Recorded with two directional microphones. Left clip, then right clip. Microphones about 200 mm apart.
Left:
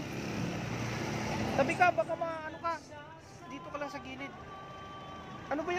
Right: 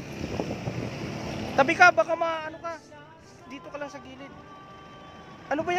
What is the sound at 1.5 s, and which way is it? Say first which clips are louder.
Speech: right 10 dB; 40° right (ahead or behind).